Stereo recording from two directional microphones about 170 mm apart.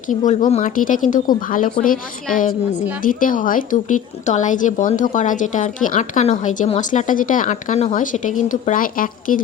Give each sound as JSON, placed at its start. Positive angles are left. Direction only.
{"t": 0.1, "sound": "a woman's voice", "side_deg": 45}